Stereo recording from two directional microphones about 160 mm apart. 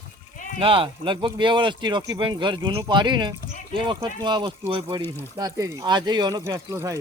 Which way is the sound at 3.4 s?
55° left (ahead or behind).